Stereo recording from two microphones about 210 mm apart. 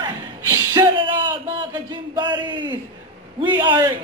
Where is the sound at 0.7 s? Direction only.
20° right (ahead or behind).